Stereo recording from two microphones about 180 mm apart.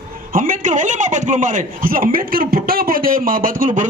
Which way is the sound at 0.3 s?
50° right (ahead or behind).